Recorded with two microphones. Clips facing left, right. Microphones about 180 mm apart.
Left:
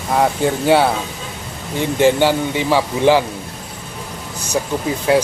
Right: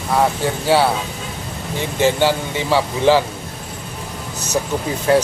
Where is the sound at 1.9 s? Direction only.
15° left (ahead or behind).